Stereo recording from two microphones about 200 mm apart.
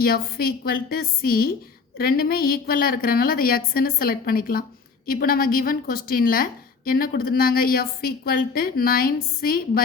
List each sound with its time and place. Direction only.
0.0 s a woman's voice: 50° left (ahead or behind)